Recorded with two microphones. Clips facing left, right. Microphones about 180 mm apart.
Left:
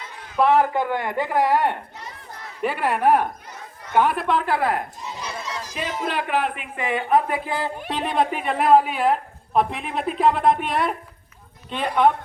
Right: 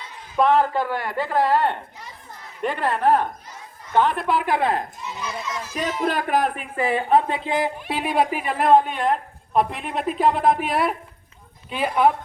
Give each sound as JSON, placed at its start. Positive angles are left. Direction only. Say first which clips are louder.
{"t": 0.3, "sound": "speech", "louder": "even", "side_deg": 10}
{"t": 4.3, "sound": "speech", "louder": "even", "side_deg": -10}
{"t": 5.0, "sound": "speech", "louder": "right 1 dB", "side_deg": 35}
{"t": 5.7, "sound": "speech", "louder": "right 3 dB", "side_deg": -45}